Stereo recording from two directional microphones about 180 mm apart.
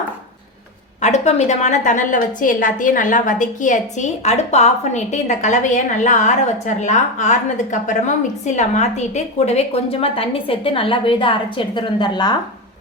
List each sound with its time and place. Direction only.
1.0 s a woman's voice: 40° left (ahead or behind)